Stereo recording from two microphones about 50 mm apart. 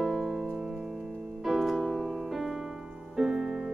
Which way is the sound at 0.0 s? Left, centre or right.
Centre.